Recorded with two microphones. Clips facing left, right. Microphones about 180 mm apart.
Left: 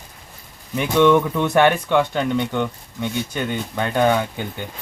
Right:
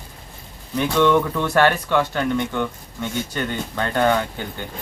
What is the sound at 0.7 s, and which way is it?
Speech, 15° left (ahead or behind).